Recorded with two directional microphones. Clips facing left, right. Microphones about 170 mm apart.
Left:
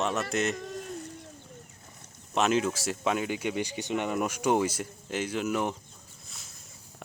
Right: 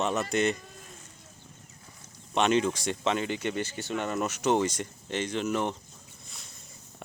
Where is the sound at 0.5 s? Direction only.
70° left (ahead or behind).